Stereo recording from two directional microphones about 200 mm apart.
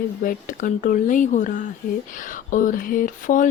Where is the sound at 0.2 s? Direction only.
40° left (ahead or behind).